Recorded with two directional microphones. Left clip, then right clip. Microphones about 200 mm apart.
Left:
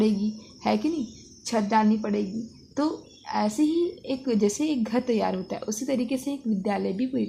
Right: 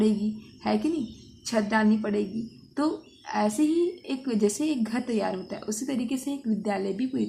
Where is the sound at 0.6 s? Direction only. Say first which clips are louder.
Left 1 dB; 35° left (ahead or behind).